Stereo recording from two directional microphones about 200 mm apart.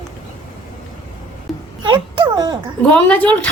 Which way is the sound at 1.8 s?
25° right (ahead or behind).